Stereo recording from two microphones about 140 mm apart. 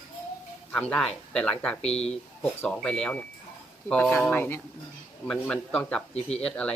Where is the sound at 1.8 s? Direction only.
50° left (ahead or behind).